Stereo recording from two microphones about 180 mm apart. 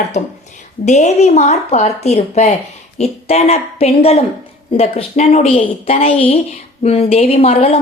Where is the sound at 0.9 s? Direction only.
40° left (ahead or behind).